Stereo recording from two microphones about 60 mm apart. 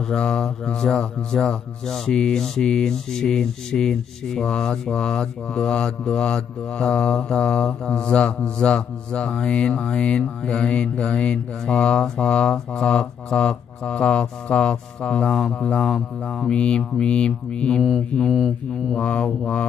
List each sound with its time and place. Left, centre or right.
0.1 s speech: centre
18.3 s mantra: centre
18.9 s speech: centre